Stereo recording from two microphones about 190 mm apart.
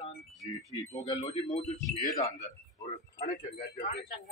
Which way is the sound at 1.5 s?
35° left (ahead or behind).